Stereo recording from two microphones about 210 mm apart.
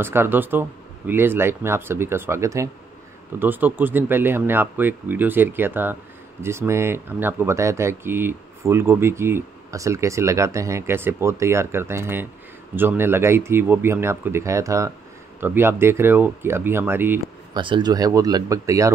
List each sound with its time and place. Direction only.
0.0 s speech: 10° right (ahead or behind)
17.6 s speech: 20° right (ahead or behind)